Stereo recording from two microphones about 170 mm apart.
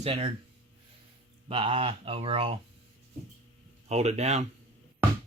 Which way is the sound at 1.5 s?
30° right (ahead or behind).